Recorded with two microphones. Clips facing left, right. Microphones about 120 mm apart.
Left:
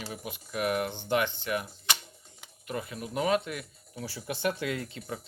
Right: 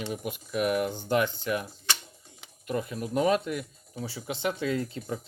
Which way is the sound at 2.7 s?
40° right (ahead or behind).